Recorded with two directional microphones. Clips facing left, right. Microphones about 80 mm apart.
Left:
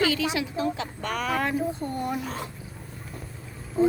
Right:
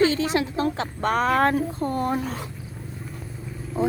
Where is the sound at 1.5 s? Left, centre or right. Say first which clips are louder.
Right 3 dB; right.